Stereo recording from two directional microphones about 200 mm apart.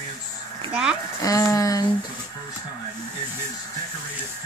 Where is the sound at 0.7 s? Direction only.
5° right (ahead or behind).